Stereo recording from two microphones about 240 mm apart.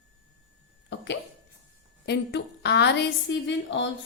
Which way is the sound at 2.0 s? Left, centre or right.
Left.